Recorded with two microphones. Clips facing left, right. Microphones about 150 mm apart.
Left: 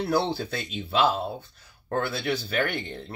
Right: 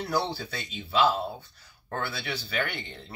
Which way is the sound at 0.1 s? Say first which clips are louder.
Left 3 dB; 50° left (ahead or behind).